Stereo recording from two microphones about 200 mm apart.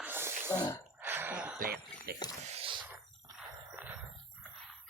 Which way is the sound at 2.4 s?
30° right (ahead or behind).